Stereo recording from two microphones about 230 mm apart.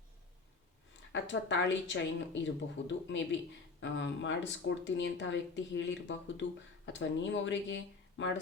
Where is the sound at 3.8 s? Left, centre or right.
Left.